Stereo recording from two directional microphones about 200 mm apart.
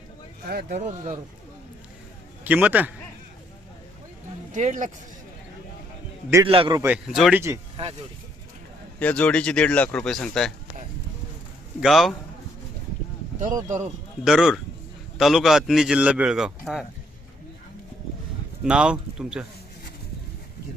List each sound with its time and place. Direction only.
0.4 s speech: 50° right (ahead or behind)
0.8 s speech: 35° right (ahead or behind)
2.4 s speech: 10° right (ahead or behind)
4.5 s speech: 35° right (ahead or behind)
6.4 s a man's voice: 25° right (ahead or behind)
6.8 s speech: 5° right (ahead or behind)
9.0 s a man's voice: 5° left (ahead or behind)
11.8 s a man's voice: centre (ahead or behind)
13.7 s speech: 35° right (ahead or behind)
14.3 s a man's voice: centre (ahead or behind)
18.6 s a man's voice: 5° right (ahead or behind)